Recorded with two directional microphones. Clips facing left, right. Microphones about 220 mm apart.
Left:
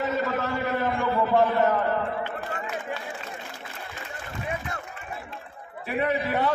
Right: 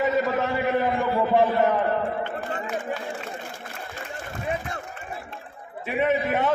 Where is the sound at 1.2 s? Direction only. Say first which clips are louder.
Right 1 dB; 15° right (ahead or behind).